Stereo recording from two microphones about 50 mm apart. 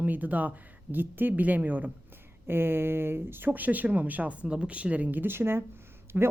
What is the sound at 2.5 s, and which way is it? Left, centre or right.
Speech, right.